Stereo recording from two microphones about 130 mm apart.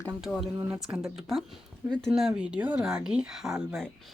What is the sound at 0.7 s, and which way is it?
Speech, 15° right (ahead or behind).